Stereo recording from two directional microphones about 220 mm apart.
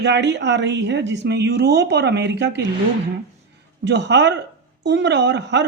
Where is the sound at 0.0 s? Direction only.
50° right (ahead or behind).